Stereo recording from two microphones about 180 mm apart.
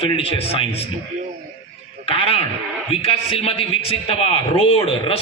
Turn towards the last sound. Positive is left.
turn(degrees=30)  # may be behind; listen again after turning